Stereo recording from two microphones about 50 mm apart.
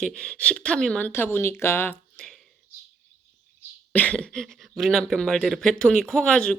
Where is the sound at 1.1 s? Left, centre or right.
Left.